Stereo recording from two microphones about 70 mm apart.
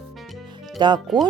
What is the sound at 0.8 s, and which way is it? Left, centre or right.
Speech, right.